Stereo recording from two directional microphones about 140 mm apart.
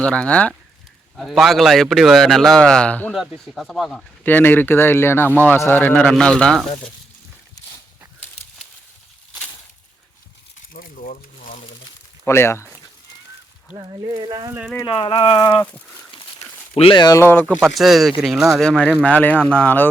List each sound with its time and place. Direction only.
0.0 s a man's voice: 10° left (ahead or behind)
4.2 s speech: 15° left (ahead or behind)
10.8 s a sound: 75° left (ahead or behind)
12.2 s speech: 20° left (ahead or behind)
13.7 s speech: 30° right (ahead or behind)
14.8 s speech: 35° left (ahead or behind)
15.4 s a sound: 30° left (ahead or behind)
16.4 s a man's voice: 45° left (ahead or behind); by 19.9 s 10° left (ahead or behind)